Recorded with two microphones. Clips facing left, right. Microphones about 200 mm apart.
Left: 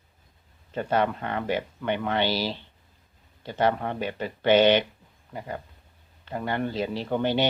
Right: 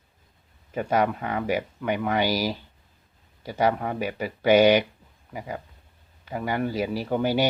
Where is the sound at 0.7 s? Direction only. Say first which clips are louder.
Right 1 dB; 10° right (ahead or behind).